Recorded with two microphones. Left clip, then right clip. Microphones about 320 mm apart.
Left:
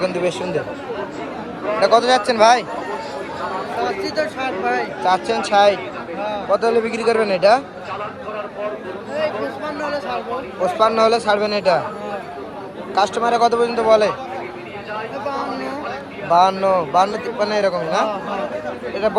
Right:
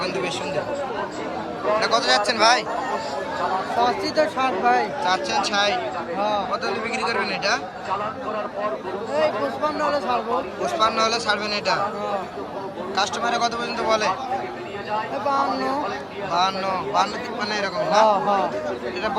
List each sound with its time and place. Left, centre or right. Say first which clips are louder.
0.0 s a man's voice: left 5 dB; centre
1.8 s a man's voice: left 8 dB; centre
3.8 s speech: right 1 dB; right
5.0 s a man's voice: left 4 dB; centre
9.1 s a sound: even; right
10.6 s a man's voice: left 7 dB; centre
13.0 s a man's voice: left 6 dB; centre
15.3 s chatter: right 5 dB; right
16.3 s a man's voice: left 8 dB; centre